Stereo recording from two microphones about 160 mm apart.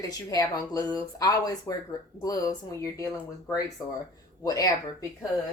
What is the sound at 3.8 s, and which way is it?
Speech, 25° left (ahead or behind).